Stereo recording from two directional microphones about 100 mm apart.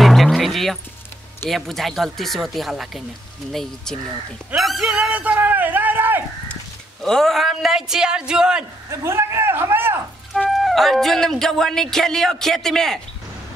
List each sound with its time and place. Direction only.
0.0 s music: centre (ahead or behind)
1.5 s speech: centre (ahead or behind)
4.6 s a man's voice: centre (ahead or behind); by 6.2 s 20° right (ahead or behind)
6.5 s speech: 5° left (ahead or behind)
8.9 s a man's voice: 25° right (ahead or behind)
10.5 s speech: centre (ahead or behind)